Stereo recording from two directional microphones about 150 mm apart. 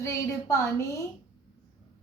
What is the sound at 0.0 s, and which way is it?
Speech, 20° left (ahead or behind).